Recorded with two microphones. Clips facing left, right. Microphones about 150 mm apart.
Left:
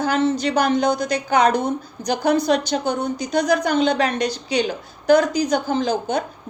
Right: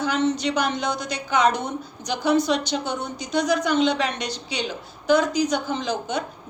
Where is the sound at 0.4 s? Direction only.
45° left (ahead or behind).